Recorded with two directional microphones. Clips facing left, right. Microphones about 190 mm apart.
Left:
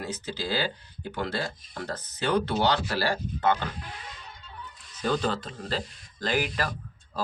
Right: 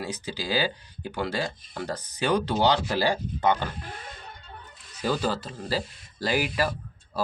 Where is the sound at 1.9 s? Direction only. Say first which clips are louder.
Right 1 dB; 15° right (ahead or behind).